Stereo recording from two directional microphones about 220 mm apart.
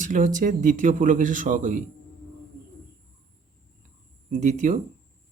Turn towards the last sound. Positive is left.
turn(degrees=-35)  # may be behind; listen again after turning